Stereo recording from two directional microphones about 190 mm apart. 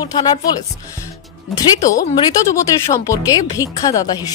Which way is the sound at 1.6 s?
15° left (ahead or behind).